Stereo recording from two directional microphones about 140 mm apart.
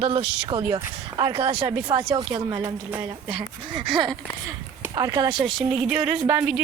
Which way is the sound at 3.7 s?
35° right (ahead or behind).